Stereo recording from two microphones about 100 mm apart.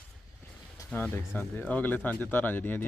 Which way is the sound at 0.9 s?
20° left (ahead or behind).